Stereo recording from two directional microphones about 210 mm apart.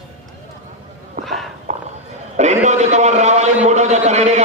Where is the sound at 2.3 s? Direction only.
35° right (ahead or behind).